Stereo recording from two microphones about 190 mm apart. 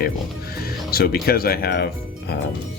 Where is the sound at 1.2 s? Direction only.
55° left (ahead or behind).